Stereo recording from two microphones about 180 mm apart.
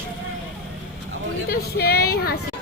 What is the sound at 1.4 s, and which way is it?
Speech, 60° left (ahead or behind).